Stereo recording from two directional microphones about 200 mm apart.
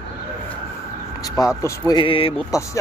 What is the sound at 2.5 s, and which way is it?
Speech, 15° left (ahead or behind).